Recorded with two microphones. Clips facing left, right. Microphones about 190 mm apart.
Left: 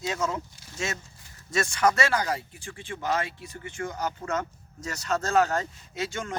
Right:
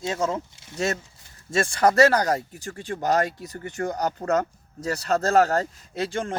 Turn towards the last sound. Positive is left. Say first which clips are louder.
# right 5 dB
turn(degrees=-35)  # may be behind; listen again after turning